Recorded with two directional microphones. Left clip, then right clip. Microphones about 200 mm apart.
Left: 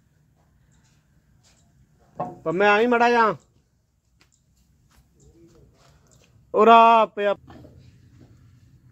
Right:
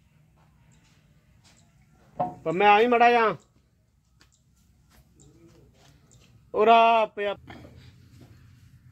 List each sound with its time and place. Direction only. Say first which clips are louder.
2.4 s speech: left 1 dB; 45° left (ahead or behind)
6.5 s speech: left 5 dB; 50° left (ahead or behind)